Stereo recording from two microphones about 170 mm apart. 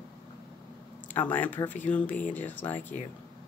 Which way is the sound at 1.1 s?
10° left (ahead or behind).